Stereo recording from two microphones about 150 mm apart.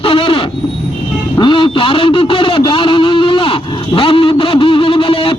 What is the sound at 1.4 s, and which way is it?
Radio, 35° left (ahead or behind).